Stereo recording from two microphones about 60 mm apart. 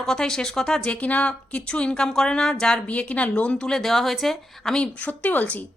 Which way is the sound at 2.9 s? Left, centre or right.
Left.